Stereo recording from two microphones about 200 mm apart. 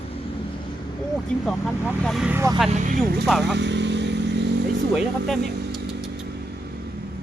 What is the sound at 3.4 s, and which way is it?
Vehicle, 60° right (ahead or behind).